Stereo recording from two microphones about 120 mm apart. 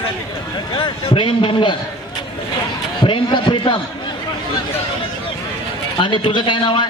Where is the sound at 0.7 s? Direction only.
45° left (ahead or behind).